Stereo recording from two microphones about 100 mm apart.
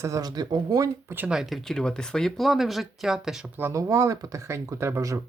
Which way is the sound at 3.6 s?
30° right (ahead or behind).